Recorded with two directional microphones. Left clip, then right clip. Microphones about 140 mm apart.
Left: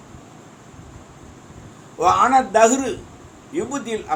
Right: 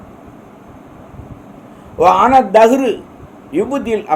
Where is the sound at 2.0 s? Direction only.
90° right.